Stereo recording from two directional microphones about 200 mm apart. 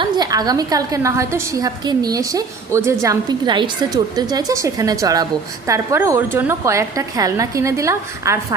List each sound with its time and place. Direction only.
0.0 s a woman's voice: 20° right (ahead or behind)